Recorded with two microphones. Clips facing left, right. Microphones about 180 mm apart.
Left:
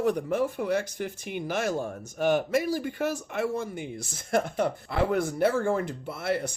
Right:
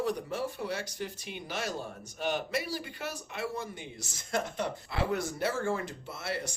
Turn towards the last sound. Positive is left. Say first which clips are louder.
# left 8 dB
turn(degrees=55)  # may be behind; listen again after turning